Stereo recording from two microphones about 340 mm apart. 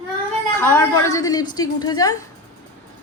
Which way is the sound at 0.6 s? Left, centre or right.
Centre.